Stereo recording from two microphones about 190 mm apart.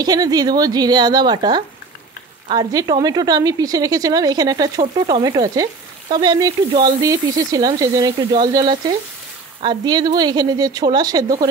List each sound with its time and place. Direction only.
0.0 s a woman's voice: 20° right (ahead or behind)